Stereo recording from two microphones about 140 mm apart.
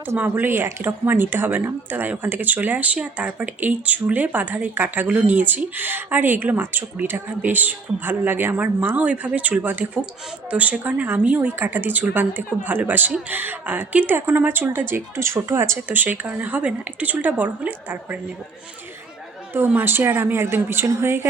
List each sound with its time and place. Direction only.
0.0 s a woman's voice: 15° right (ahead or behind)
19.5 s a woman's voice: 15° right (ahead or behind)